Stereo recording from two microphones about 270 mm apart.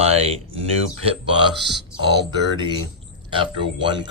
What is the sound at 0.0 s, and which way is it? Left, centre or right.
Speech, right.